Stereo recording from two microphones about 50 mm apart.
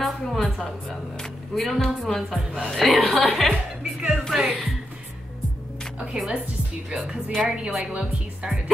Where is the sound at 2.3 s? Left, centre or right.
Right.